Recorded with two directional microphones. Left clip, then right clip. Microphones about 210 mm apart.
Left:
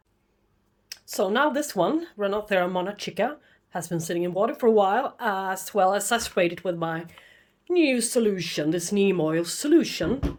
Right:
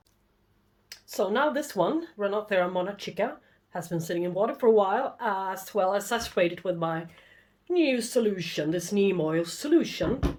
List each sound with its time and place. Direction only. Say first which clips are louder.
0.9 s speech: left 2 dB; 35° left (ahead or behind)